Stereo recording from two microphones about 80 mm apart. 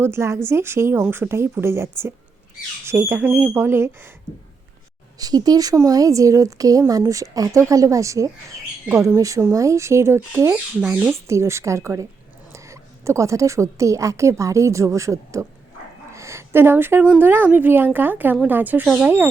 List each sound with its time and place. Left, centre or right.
0.0 s a woman's voice: right
5.2 s a woman's voice: right
10.5 s speech: centre
11.3 s a woman's voice: right
16.1 s a sound: right
17.2 s a woman's voice: right